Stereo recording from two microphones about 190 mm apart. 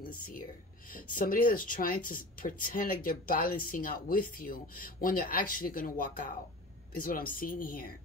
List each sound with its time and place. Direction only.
0.0 s speech: 50° left (ahead or behind)